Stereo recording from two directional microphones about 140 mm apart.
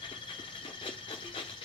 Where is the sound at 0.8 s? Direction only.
35° left (ahead or behind).